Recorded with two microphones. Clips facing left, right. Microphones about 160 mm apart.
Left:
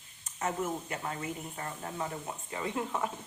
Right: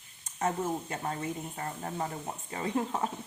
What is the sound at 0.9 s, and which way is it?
Speech, 35° right (ahead or behind).